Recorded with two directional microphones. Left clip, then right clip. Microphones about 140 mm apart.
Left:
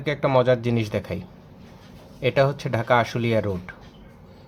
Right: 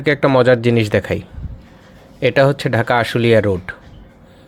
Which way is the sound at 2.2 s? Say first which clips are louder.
Right 7 dB; 35° right (ahead or behind).